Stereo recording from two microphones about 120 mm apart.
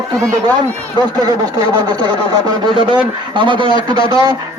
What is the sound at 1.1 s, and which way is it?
Speech, 35° right (ahead or behind).